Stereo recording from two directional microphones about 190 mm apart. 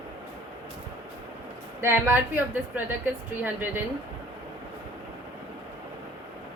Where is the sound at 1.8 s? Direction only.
10° right (ahead or behind).